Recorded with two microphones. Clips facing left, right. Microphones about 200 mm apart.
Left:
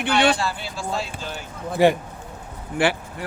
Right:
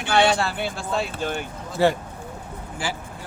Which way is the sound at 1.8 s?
15° left (ahead or behind).